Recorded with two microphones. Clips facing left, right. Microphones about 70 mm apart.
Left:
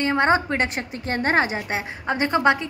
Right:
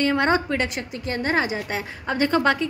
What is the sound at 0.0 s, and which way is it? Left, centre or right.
A woman's voice, left.